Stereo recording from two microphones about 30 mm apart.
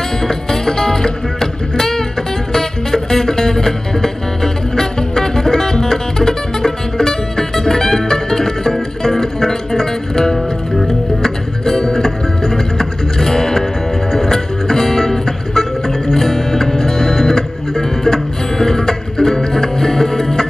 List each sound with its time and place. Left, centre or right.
0.2 s music: centre